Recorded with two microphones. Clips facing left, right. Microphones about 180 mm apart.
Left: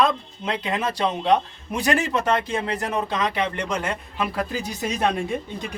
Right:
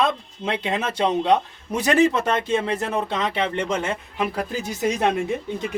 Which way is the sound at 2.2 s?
25° right (ahead or behind).